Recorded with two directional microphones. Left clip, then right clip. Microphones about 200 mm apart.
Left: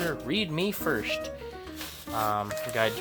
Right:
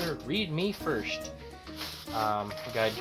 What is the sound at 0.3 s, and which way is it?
Speech, 50° left (ahead or behind).